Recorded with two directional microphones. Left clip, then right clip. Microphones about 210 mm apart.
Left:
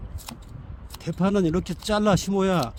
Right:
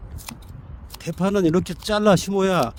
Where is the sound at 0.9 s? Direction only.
30° right (ahead or behind).